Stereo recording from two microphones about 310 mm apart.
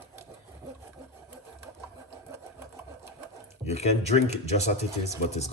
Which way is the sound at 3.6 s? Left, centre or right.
Left.